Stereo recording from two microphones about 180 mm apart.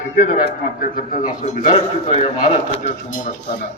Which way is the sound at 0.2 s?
45° left (ahead or behind).